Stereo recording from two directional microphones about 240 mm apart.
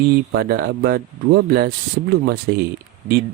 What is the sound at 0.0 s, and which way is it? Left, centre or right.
Speech, right.